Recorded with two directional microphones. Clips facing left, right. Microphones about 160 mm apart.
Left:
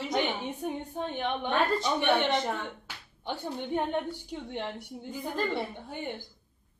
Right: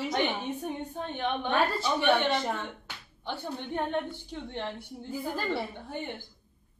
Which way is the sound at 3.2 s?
15° left (ahead or behind).